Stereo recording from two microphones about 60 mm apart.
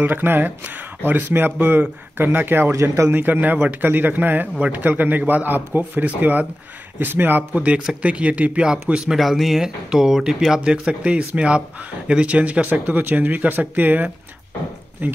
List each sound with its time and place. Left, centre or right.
0.0 s speech: right
2.7 s a man's voice: right
3.1 s speech: right; by 9.1 s centre
9.1 s speech: centre; by 14.1 s right